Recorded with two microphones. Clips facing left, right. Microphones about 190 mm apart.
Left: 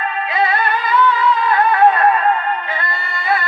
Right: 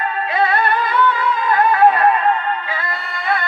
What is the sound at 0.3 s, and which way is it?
Music, 60° right (ahead or behind).